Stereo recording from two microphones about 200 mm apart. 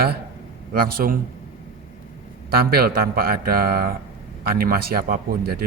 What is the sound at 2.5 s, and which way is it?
A man's voice, 50° right (ahead or behind).